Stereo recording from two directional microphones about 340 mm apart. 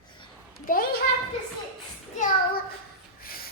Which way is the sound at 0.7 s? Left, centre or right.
Left.